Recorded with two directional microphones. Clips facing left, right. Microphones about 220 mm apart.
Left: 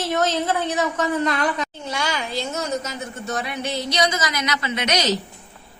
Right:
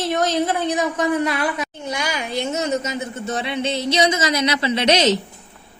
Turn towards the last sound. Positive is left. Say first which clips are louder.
# right 5 dB
turn(degrees=-25)  # may be behind; listen again after turning